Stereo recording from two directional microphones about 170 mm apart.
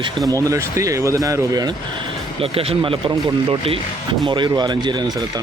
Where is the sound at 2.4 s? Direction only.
35° right (ahead or behind).